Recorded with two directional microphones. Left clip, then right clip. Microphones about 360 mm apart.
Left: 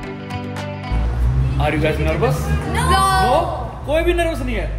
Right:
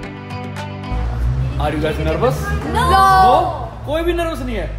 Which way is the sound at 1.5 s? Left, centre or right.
Centre.